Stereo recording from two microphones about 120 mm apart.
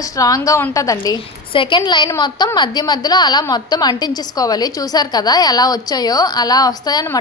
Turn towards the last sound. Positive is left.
turn(degrees=30)  # may be behind; listen again after turning